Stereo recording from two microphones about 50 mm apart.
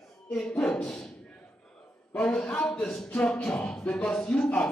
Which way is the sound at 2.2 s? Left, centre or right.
Left.